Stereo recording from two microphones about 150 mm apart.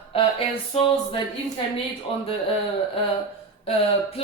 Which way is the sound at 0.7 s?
40° left (ahead or behind).